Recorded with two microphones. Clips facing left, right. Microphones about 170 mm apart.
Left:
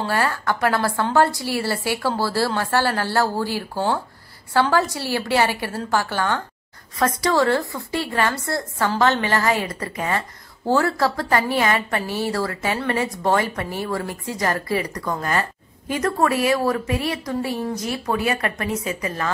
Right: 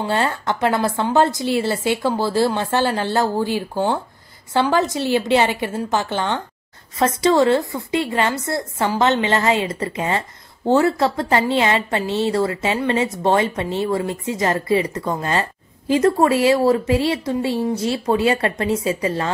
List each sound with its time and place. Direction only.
0.0 s a woman's voice: 25° right (ahead or behind)